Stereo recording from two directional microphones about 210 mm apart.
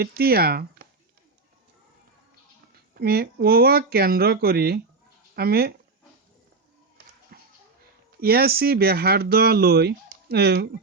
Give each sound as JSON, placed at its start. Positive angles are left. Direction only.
{"t": 0.0, "sound": "speech", "side_deg": -45}
{"t": 2.9, "sound": "speech", "side_deg": -45}
{"t": 7.3, "sound": "children playing", "side_deg": -45}
{"t": 8.2, "sound": "speech", "side_deg": -45}